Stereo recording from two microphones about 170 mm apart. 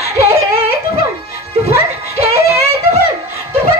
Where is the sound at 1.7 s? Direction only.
65° left (ahead or behind).